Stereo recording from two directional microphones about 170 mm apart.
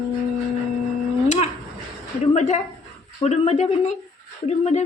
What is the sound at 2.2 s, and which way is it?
Speech, 40° left (ahead or behind).